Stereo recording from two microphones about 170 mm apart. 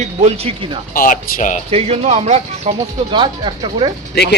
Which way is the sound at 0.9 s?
55° left (ahead or behind).